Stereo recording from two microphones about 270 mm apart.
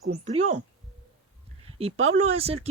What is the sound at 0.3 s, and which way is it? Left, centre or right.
Speech, right.